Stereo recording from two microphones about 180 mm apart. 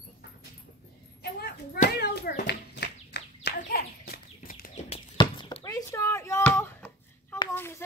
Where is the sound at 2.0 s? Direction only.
60° left (ahead or behind); by 5.0 s 40° left (ahead or behind).